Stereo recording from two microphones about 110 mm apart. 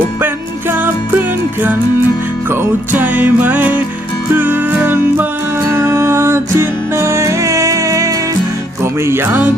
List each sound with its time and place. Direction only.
0.7 s music: 15° right (ahead or behind)
2.5 s music: 20° right (ahead or behind)